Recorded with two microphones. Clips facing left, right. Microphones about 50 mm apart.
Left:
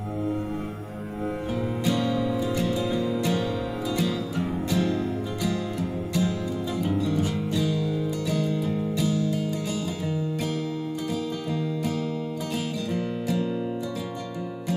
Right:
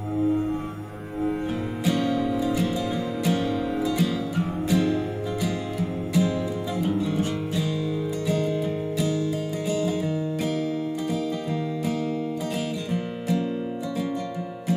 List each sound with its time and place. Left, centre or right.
1.9 s music: centre
8.3 s music: right
13.3 s music: centre